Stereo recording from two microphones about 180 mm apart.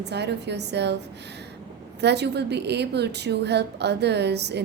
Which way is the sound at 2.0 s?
70° right (ahead or behind).